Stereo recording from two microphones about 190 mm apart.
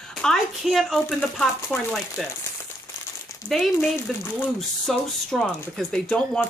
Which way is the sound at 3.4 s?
Centre (ahead or behind).